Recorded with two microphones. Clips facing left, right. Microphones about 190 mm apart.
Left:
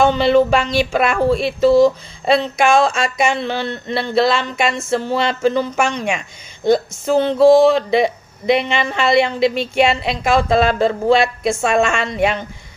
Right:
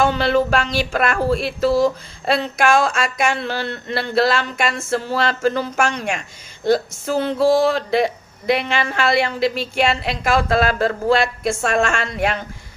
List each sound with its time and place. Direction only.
0.0 s speech: 5° right (ahead or behind)